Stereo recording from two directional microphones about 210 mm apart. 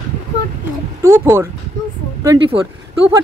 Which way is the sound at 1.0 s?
10° right (ahead or behind).